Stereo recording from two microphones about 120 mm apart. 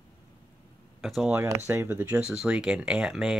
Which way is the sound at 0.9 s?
Centre (ahead or behind).